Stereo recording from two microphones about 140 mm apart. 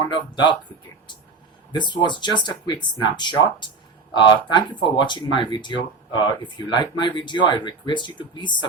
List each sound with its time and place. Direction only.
0.0 s speech: 35° left (ahead or behind)
1.7 s speech: 35° left (ahead or behind)